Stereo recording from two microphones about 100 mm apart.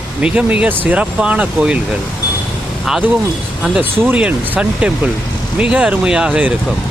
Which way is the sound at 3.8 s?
20° right (ahead or behind).